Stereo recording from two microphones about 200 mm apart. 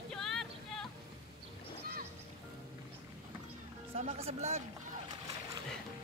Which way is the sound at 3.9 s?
35° right (ahead or behind).